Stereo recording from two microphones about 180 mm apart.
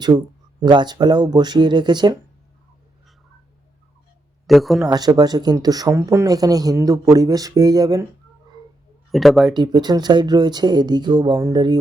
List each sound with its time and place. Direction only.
0.6 s speech: 25° right (ahead or behind)
4.4 s speech: centre (ahead or behind)
4.9 s speech: 20° right (ahead or behind)
9.1 s speech: centre (ahead or behind)
9.6 s speech: 25° right (ahead or behind)